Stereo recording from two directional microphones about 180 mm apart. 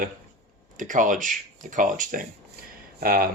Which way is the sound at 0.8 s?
45° right (ahead or behind).